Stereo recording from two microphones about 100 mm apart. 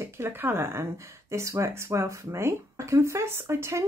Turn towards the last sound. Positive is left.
turn(degrees=-30)  # may be behind; listen again after turning